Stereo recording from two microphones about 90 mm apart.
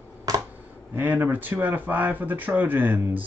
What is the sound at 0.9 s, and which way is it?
Speech, 20° right (ahead or behind).